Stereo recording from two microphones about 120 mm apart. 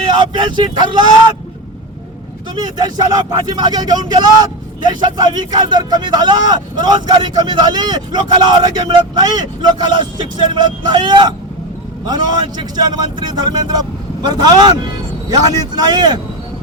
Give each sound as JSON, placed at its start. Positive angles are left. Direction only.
{"t": 0.0, "sound": "speech", "side_deg": -40}
{"t": 2.6, "sound": "speech", "side_deg": -35}